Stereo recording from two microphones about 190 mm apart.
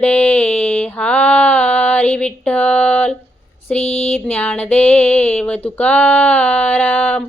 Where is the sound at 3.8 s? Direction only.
35° left (ahead or behind).